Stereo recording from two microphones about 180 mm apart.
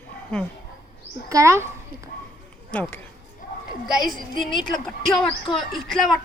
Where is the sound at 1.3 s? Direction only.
15° right (ahead or behind).